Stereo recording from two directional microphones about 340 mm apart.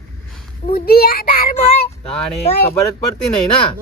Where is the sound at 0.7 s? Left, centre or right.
Left.